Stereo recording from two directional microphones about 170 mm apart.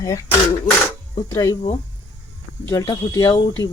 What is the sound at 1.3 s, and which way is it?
Speech, 20° left (ahead or behind).